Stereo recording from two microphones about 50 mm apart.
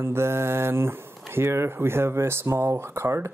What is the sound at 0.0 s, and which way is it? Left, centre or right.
Speech, right.